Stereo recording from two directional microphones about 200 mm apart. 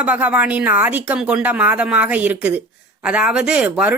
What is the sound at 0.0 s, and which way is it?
Speech, 5° right (ahead or behind).